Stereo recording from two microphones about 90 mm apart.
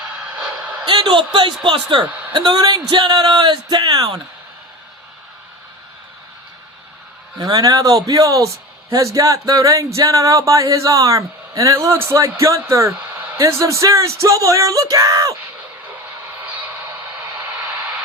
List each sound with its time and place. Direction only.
0.3 s a sound: 15° right (ahead or behind)
0.9 s a woman's voice: 60° right (ahead or behind)
7.3 s music: 45° right (ahead or behind)